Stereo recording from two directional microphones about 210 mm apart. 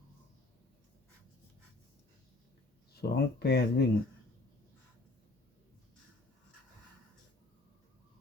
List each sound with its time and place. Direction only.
2.9 s speech: 50° left (ahead or behind)